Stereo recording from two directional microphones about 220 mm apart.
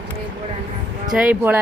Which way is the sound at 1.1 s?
5° right (ahead or behind).